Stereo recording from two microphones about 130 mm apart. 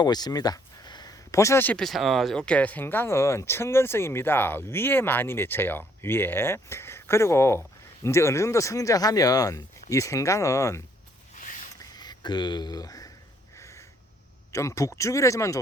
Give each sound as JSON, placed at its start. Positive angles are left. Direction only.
{"t": 0.0, "sound": "speech", "side_deg": 30}
{"t": 1.8, "sound": "speech", "side_deg": 0}
{"t": 11.9, "sound": "speech", "side_deg": 35}
{"t": 13.6, "sound": "a sound", "side_deg": 20}
{"t": 14.5, "sound": "speech", "side_deg": 25}